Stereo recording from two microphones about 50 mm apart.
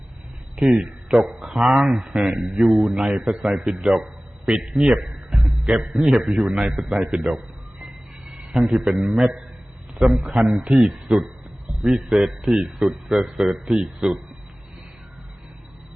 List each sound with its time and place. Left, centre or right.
0.5 s a man's voice: centre
8.5 s a man's voice: centre